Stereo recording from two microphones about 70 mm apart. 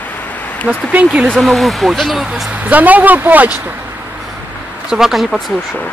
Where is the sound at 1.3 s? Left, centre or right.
Centre.